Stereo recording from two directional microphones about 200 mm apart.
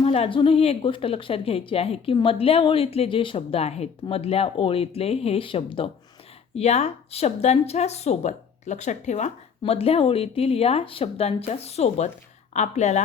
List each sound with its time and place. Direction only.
0.0 s speech: 30° left (ahead or behind)